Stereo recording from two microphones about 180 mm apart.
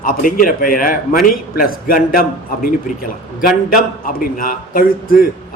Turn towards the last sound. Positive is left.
turn(degrees=55)  # may be behind; listen again after turning